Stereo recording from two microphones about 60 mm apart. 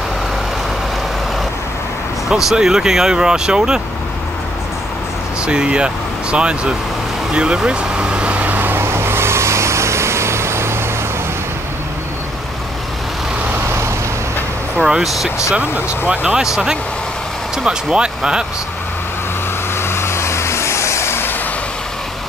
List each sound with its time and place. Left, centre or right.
2.2 s speech: centre
5.5 s speech: centre
7.3 s vehicle: centre; by 10.8 s right
14.8 s speech: centre
17.6 s speech: centre
19.8 s vehicle: left